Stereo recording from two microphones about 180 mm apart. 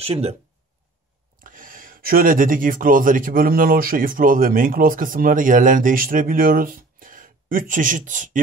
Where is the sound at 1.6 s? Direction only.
50° right (ahead or behind).